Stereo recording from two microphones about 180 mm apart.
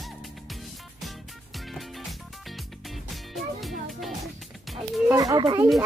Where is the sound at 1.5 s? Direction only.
Centre (ahead or behind).